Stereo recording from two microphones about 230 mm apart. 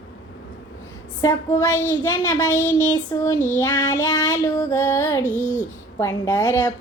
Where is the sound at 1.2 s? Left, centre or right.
Centre.